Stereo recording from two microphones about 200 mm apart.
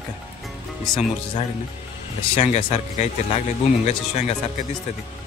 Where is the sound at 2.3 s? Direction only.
35° left (ahead or behind).